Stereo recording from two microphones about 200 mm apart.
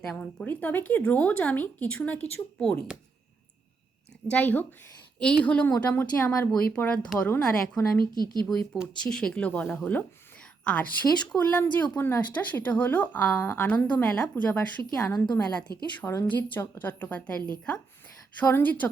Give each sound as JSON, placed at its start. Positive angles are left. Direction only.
{"t": 0.0, "sound": "speech", "side_deg": 5}
{"t": 4.3, "sound": "speech", "side_deg": 10}
{"t": 8.1, "sound": "speech", "side_deg": -20}
{"t": 8.4, "sound": "a woman's voice", "side_deg": 0}
{"t": 15.0, "sound": "a woman's voice", "side_deg": 15}
{"t": 16.0, "sound": "speech", "side_deg": 10}